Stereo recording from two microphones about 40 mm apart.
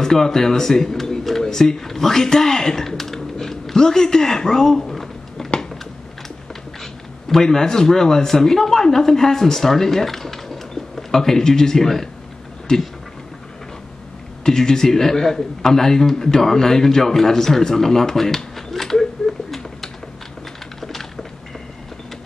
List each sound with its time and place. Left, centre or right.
0.0 s speech: centre
6.8 s speech: centre
14.4 s a man's voice: centre
20.8 s a sound: centre